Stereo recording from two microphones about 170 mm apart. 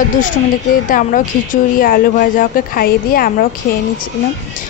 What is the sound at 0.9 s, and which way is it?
Speech, 50° left (ahead or behind).